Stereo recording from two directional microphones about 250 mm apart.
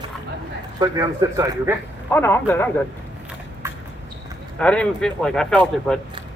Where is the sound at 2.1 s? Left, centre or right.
Centre.